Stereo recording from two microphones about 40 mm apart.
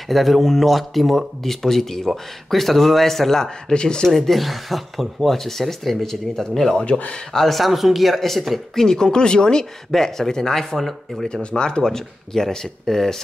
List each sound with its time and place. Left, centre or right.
0.1 s speech: centre
3.7 s speech: left
4.1 s speech: centre
6.8 s speech: left
7.3 s speech: centre
8.8 s speech: centre
11.5 s speech: left